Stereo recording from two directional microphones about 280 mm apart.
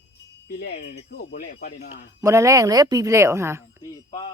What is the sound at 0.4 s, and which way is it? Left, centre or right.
Speech, left.